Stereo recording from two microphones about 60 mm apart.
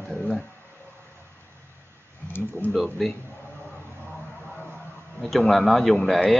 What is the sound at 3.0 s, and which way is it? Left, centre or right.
Speech, centre.